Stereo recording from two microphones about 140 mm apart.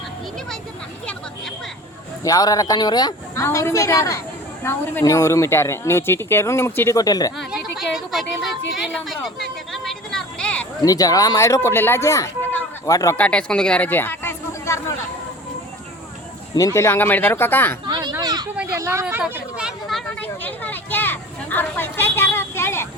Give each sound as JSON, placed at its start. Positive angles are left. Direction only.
{"t": 2.2, "sound": "speech", "side_deg": 25}
{"t": 7.3, "sound": "a woman's voice", "side_deg": 0}
{"t": 10.8, "sound": "speech", "side_deg": 25}
{"t": 13.1, "sound": "speech", "side_deg": 10}
{"t": 16.6, "sound": "speech", "side_deg": 20}
{"t": 17.8, "sound": "a sound", "side_deg": -30}
{"t": 18.7, "sound": "speech", "side_deg": -20}
{"t": 20.1, "sound": "a sound", "side_deg": 10}